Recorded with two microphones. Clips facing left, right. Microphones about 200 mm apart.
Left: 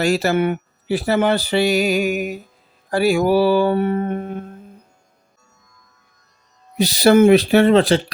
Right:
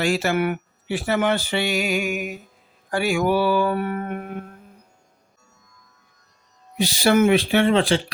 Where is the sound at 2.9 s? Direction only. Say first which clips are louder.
Left 5 dB; 35° left (ahead or behind).